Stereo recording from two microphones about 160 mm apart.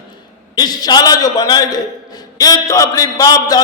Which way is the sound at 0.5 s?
25° left (ahead or behind).